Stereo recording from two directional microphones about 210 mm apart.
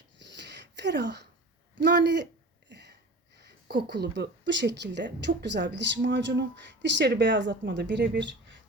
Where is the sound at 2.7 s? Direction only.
55° right (ahead or behind).